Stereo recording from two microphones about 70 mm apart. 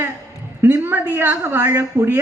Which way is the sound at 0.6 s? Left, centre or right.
Right.